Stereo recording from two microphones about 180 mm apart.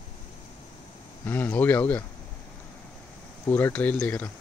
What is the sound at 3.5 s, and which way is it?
Speech, 10° left (ahead or behind).